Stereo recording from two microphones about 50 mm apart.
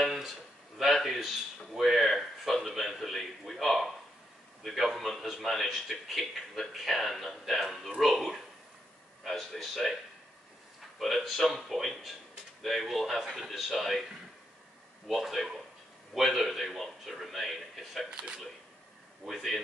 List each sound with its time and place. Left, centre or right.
0.0 s a sound: centre
0.7 s a man's voice: centre
11.0 s a man's voice: centre
15.0 s a man's voice: centre
18.1 s speech: centre
19.2 s a man's voice: centre